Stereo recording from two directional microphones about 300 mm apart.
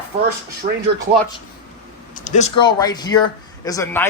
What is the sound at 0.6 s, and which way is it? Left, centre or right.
Speech, right.